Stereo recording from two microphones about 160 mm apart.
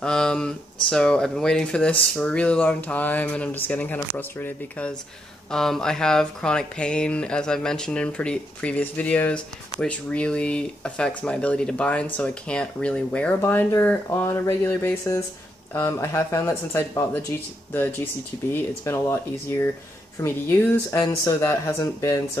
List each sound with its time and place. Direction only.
0.0 s speech: 5° left (ahead or behind)
18.5 s speech: 15° left (ahead or behind)